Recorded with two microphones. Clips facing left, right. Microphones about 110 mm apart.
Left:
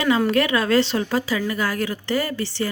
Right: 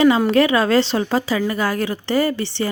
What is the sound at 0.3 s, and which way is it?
Speech, 30° right (ahead or behind).